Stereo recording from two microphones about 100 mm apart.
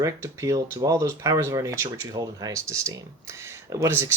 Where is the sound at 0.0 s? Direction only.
35° right (ahead or behind).